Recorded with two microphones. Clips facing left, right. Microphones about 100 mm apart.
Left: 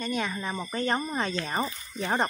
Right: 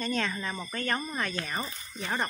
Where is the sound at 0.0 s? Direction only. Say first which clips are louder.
Left 1 dB; 10° left (ahead or behind).